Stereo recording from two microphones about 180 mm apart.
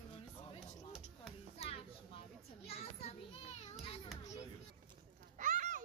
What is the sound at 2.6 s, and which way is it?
Children playing, 35° left (ahead or behind).